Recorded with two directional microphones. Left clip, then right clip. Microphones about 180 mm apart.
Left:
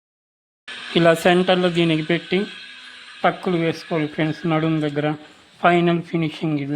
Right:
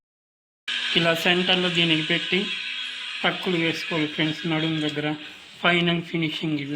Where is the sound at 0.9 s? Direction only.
60° left (ahead or behind).